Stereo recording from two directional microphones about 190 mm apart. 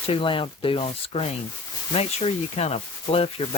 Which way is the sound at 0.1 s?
25° left (ahead or behind).